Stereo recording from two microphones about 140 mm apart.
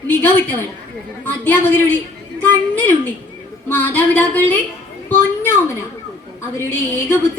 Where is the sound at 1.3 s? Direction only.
15° left (ahead or behind).